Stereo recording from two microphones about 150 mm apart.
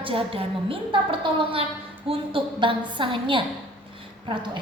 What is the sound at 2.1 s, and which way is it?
A woman's voice, 35° right (ahead or behind).